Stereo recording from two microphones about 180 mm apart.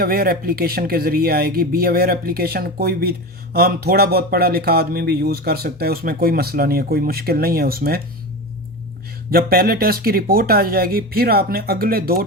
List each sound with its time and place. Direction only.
0.0 s speech: 55° right (ahead or behind)
9.3 s speech: 55° right (ahead or behind)